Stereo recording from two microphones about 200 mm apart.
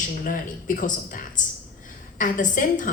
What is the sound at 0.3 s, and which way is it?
A woman's voice, 40° left (ahead or behind).